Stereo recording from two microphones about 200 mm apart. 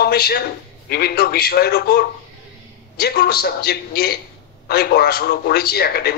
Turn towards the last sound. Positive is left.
turn(degrees=50)  # may be behind; listen again after turning